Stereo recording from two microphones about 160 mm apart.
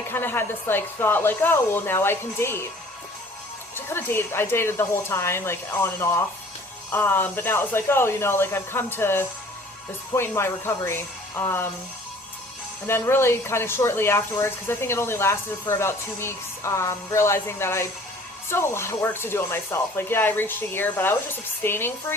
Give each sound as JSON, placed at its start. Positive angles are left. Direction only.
{"t": 0.1, "sound": "speech", "side_deg": 15}
{"t": 3.8, "sound": "speech", "side_deg": 15}
{"t": 12.9, "sound": "speech", "side_deg": 15}